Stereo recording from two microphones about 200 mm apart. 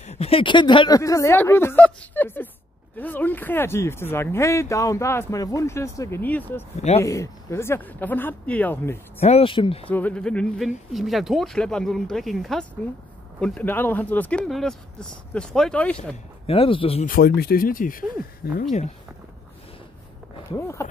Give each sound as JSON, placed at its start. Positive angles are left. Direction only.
{"t": 0.0, "sound": "speech", "side_deg": 30}
{"t": 9.2, "sound": "speech", "side_deg": 30}
{"t": 9.8, "sound": "speech", "side_deg": 5}
{"t": 16.4, "sound": "speech", "side_deg": 30}
{"t": 17.1, "sound": "speech", "side_deg": 50}
{"t": 20.5, "sound": "speech", "side_deg": 15}